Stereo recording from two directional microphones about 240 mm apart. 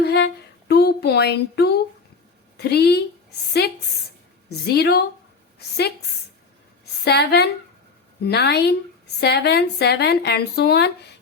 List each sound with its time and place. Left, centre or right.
0.0 s speech: left
4.4 s a woman's voice: left
7.0 s speech: left